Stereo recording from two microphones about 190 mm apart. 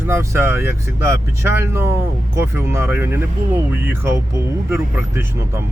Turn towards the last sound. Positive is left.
turn(degrees=-15)  # may be behind; listen again after turning